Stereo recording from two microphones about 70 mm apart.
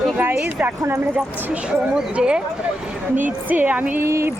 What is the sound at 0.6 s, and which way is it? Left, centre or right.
Speech, right.